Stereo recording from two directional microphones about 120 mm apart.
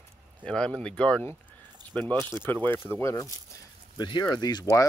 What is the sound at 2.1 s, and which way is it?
Speech, 35° right (ahead or behind).